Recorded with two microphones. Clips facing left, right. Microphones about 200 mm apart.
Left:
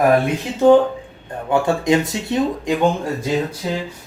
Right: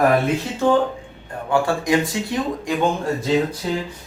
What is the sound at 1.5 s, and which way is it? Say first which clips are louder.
Speech: left 2 dB; 20° left (ahead or behind).